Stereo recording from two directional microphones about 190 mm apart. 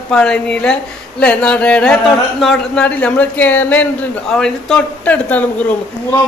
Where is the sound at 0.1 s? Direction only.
5° left (ahead or behind).